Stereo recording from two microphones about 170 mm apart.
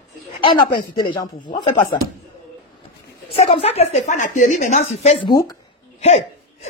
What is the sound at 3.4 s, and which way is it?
A woman's voice, 35° left (ahead or behind).